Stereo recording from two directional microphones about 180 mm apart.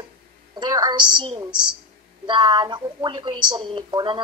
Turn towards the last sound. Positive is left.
turn(degrees=-30)  # may be behind; listen again after turning